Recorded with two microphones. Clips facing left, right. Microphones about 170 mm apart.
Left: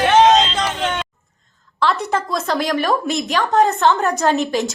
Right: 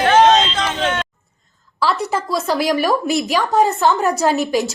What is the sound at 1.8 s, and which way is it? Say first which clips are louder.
A woman's voice: even; centre (ahead or behind).